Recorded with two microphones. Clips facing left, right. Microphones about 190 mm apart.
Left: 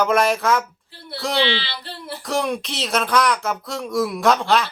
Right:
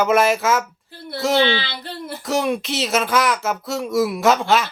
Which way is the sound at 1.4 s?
50° right (ahead or behind).